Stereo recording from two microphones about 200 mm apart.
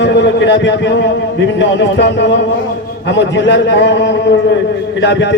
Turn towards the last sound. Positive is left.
turn(degrees=60)  # may be behind; listen again after turning